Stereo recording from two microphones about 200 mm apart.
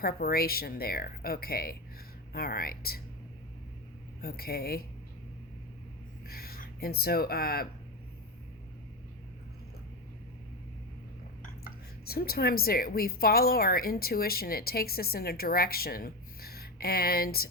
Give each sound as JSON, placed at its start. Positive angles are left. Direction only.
{"t": 0.0, "sound": "a woman's voice", "side_deg": 50}
{"t": 4.2, "sound": "a woman's voice", "side_deg": 50}
{"t": 6.2, "sound": "speech", "side_deg": 50}
{"t": 12.0, "sound": "a woman's voice", "side_deg": 50}